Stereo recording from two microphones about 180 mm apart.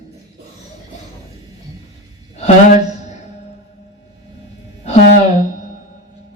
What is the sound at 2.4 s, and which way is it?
Speech, 40° left (ahead or behind).